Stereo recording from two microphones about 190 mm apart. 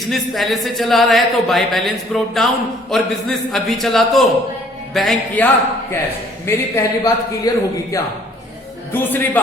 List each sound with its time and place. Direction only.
0.1 s speech: centre (ahead or behind)
6.4 s a man's voice: 15° left (ahead or behind)